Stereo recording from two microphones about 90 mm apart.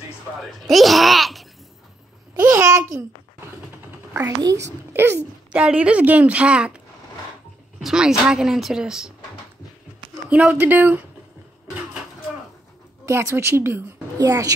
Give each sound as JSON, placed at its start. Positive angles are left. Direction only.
{"t": 0.7, "sound": "speech", "side_deg": 0}
{"t": 2.4, "sound": "babbling", "side_deg": -35}
{"t": 4.1, "sound": "a child's voice", "side_deg": -40}
{"t": 5.5, "sound": "a woman's voice", "side_deg": -15}
{"t": 7.8, "sound": "speech", "side_deg": -5}
{"t": 10.3, "sound": "a woman's voice", "side_deg": -15}
{"t": 13.0, "sound": "a woman's voice", "side_deg": -30}
{"t": 14.1, "sound": "a child's voice", "side_deg": -40}